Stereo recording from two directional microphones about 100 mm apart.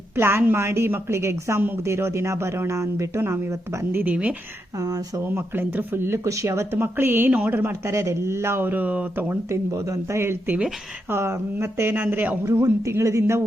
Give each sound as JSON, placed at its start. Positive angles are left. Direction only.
{"t": 0.2, "sound": "speech", "side_deg": -25}
{"t": 3.9, "sound": "a woman's voice", "side_deg": -15}
{"t": 4.8, "sound": "speech", "side_deg": -35}
{"t": 5.3, "sound": "speech", "side_deg": -20}
{"t": 12.5, "sound": "speech", "side_deg": -30}